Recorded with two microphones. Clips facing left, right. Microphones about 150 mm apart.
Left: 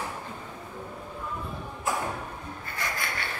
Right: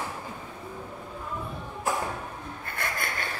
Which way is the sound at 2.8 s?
55° right (ahead or behind).